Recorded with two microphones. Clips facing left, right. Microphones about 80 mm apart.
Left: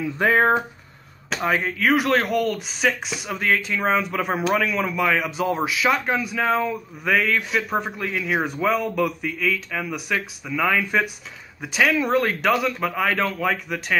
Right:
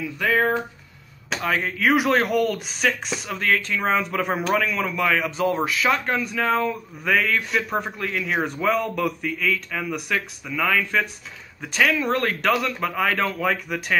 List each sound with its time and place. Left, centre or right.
0.0 s speech: left
1.6 s speech: centre